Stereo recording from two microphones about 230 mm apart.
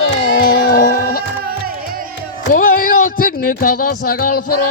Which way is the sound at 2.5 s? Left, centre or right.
Left.